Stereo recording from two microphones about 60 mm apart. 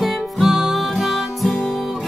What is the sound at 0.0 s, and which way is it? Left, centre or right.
Music, centre.